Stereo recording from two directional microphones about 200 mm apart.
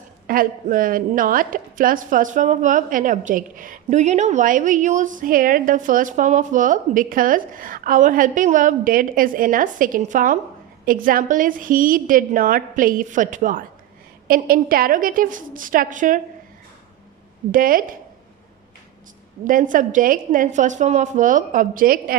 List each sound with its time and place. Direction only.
0.3 s a woman's voice: 45° right (ahead or behind)
17.5 s a woman's voice: 45° right (ahead or behind)
19.5 s a woman's voice: 40° right (ahead or behind)